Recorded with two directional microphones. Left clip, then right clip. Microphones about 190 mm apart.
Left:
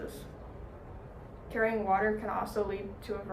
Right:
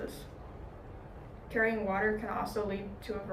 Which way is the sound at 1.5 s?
20° left (ahead or behind).